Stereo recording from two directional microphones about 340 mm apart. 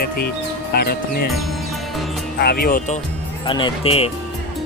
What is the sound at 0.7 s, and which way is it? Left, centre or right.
Speech, left.